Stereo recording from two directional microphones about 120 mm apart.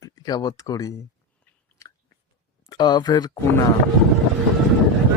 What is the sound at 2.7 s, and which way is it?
Speech, 35° left (ahead or behind).